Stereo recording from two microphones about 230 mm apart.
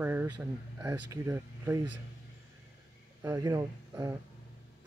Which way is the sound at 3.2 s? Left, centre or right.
Centre.